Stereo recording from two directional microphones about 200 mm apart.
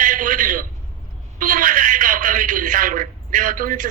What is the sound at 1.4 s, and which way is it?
A man's voice, 40° right (ahead or behind).